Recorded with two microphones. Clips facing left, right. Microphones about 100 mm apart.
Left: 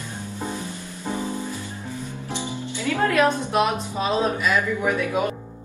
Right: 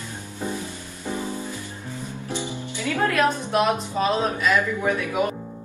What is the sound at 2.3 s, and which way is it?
Music, 15° left (ahead or behind).